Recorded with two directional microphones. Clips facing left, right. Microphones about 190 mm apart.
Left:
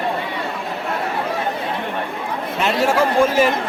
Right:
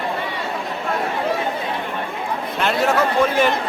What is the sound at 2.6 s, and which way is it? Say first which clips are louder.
Speech: left 1 dB; 5° left (ahead or behind).